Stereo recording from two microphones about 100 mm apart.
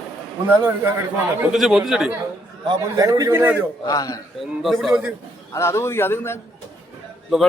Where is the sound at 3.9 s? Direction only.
35° left (ahead or behind).